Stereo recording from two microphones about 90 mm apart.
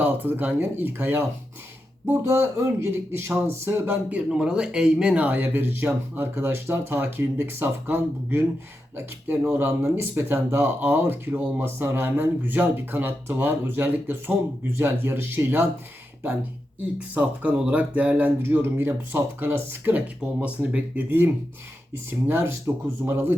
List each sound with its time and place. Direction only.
0.0 s speech: 20° right (ahead or behind)
2.3 s speech: 30° right (ahead or behind)
4.1 s speech: 10° right (ahead or behind); by 8.4 s 25° right (ahead or behind)
9.5 s speech: 25° right (ahead or behind)
17.2 s speech: 15° right (ahead or behind)
22.3 s speech: 30° right (ahead or behind)